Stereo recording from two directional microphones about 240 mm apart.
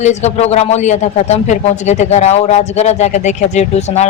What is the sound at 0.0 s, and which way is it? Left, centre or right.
Speech, left.